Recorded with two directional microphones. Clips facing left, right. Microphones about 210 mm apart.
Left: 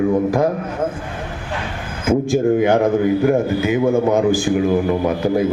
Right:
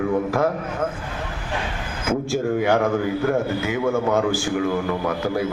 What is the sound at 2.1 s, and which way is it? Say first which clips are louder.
A man's voice: left 7 dB; 15° left (ahead or behind).